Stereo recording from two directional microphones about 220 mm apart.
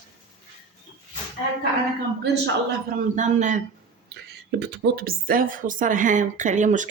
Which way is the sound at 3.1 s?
35° right (ahead or behind).